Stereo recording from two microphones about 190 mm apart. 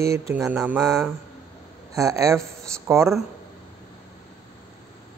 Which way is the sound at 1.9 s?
15° right (ahead or behind).